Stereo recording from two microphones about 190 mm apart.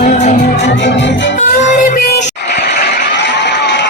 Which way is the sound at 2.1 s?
60° left (ahead or behind).